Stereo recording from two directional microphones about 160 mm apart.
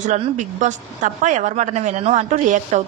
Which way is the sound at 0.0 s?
50° right (ahead or behind).